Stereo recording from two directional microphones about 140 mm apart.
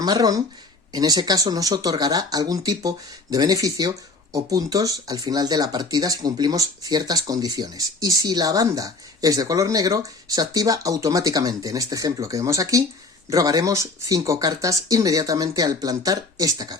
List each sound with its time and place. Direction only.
0.0 s speech: 25° right (ahead or behind)